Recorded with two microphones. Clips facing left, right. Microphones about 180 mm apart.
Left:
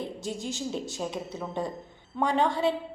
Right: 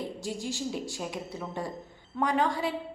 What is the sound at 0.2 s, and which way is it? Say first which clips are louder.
A woman's voice: even; 20° left (ahead or behind).